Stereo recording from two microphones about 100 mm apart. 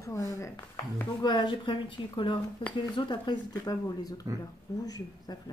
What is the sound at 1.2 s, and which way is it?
A woman's voice, 50° left (ahead or behind).